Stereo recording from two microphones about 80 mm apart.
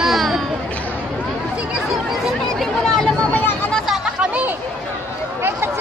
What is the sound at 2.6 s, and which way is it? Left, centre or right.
Chatter, centre.